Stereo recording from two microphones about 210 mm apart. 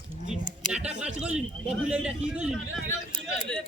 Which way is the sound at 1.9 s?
5° right (ahead or behind).